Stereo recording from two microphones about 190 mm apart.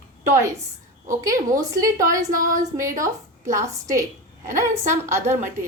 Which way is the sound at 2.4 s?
40° right (ahead or behind).